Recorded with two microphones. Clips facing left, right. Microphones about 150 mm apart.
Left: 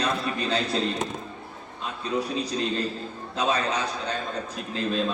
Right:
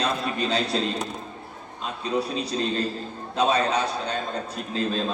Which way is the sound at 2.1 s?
30° right (ahead or behind).